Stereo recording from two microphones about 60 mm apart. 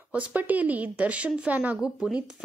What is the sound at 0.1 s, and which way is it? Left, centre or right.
A woman's voice, right.